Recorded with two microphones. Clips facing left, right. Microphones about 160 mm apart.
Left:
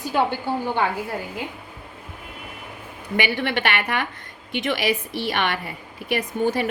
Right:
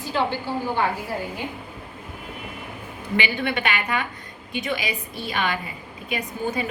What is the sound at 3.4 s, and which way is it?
A woman's voice, 65° left (ahead or behind).